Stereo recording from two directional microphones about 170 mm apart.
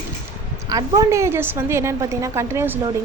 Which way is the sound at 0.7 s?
20° right (ahead or behind).